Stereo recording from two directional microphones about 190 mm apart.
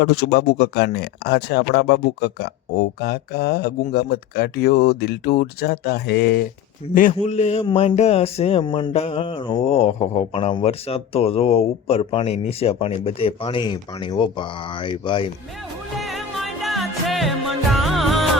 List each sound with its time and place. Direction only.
0.0 s speech: 55° left (ahead or behind)
6.8 s speech: 30° left (ahead or behind)
16.0 s music: centre (ahead or behind)